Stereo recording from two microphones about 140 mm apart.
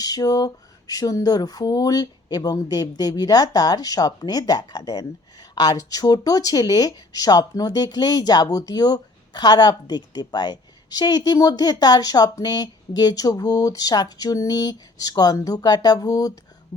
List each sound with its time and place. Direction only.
0.0 s speech: 25° left (ahead or behind)